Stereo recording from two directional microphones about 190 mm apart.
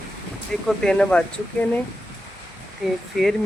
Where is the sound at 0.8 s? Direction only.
5° left (ahead or behind).